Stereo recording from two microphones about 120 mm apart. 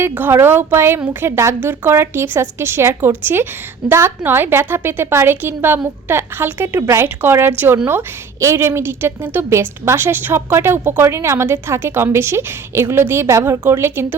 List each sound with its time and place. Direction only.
0.0 s a woman's voice: 20° right (ahead or behind)